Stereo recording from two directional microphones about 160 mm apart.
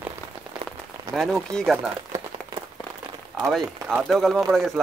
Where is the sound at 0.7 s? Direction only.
Centre (ahead or behind).